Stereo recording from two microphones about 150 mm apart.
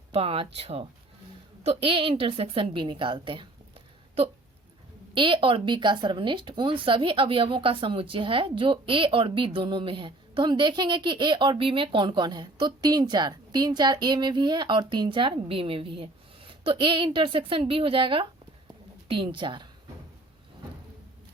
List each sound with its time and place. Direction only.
0.1 s a woman's voice: 40° right (ahead or behind)